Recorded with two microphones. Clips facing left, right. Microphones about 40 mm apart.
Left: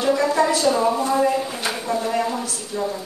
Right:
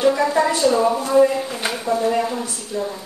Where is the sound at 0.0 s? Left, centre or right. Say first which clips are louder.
Right 2 dB; centre.